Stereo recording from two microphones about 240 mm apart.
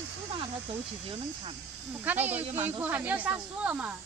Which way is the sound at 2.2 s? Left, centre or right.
Centre.